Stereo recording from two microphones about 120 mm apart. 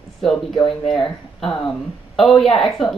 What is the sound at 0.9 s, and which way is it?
Speech, 5° left (ahead or behind).